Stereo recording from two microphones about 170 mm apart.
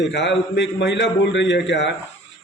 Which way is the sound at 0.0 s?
90° left.